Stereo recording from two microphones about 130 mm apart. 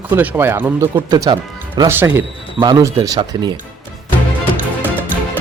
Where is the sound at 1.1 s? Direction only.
30° right (ahead or behind).